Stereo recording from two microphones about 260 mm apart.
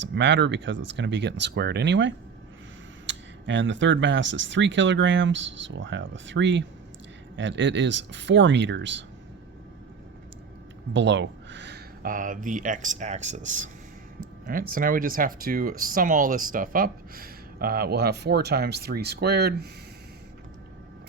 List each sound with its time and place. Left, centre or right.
0.0 s speech: right
10.9 s speech: right
14.7 s speech: right